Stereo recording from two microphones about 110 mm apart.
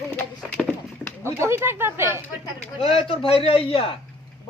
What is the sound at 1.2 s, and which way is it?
Speech, 25° right (ahead or behind).